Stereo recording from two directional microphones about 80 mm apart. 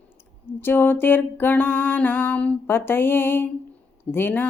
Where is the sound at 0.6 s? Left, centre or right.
Left.